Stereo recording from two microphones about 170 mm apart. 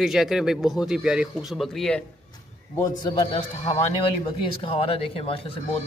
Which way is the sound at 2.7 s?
20° left (ahead or behind).